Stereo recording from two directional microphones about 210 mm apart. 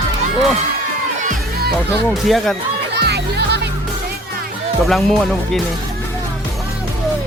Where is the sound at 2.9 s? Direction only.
50° right (ahead or behind).